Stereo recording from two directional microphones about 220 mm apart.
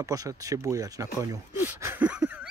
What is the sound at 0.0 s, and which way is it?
Speech, 15° right (ahead or behind).